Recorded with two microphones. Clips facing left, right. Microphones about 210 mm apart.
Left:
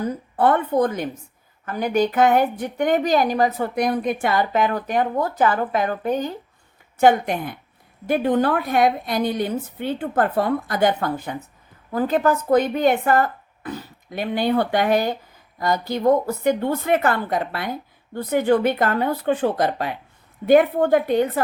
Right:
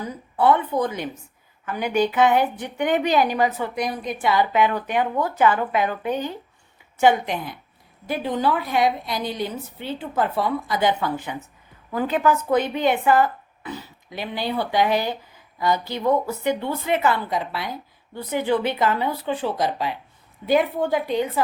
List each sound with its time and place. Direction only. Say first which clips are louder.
0.0 s a woman's voice: left 1 dB; 50° left (ahead or behind)